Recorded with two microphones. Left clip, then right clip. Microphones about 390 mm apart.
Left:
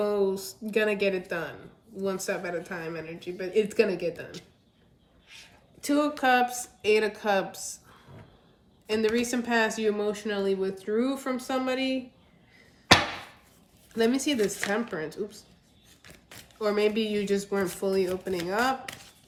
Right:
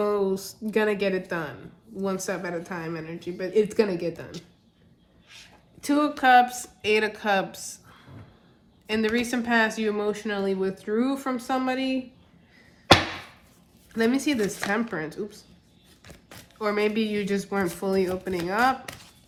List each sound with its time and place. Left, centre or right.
0.0 s speech: centre
5.8 s speech: centre
13.9 s speech: centre
16.0 s a sound: centre
16.6 s speech: centre